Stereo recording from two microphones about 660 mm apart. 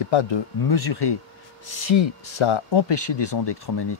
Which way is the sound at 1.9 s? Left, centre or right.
Left.